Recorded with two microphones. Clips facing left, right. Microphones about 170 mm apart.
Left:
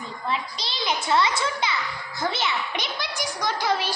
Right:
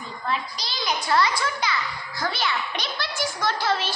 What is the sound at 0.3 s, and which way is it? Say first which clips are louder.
A child's voice: even; 25° left (ahead or behind).